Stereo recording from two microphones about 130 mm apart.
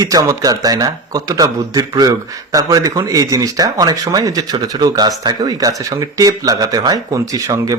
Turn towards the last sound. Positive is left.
turn(degrees=-25)  # may be behind; listen again after turning